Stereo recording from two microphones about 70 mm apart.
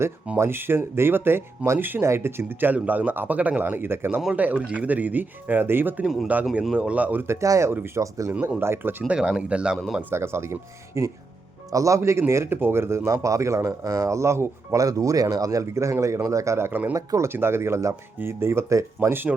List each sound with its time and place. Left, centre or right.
0.3 s speech: right
4.4 s speech: centre
6.4 s speech: centre
7.3 s speech: right
8.3 s speech: right
8.6 s speech: right
9.0 s speech: centre
10.1 s speech: right
14.8 s speech: right
17.2 s speech: right
19.0 s speech: right